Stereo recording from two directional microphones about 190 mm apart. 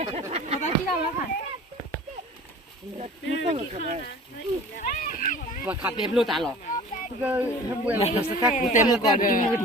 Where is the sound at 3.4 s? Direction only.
30° right (ahead or behind).